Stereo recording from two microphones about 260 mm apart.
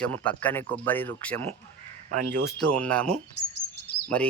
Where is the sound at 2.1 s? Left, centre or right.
Right.